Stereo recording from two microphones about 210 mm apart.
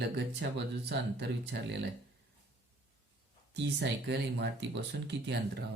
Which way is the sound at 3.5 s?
55° right (ahead or behind).